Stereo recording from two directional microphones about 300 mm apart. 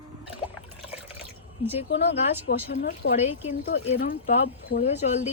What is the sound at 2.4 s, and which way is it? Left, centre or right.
Speech, left.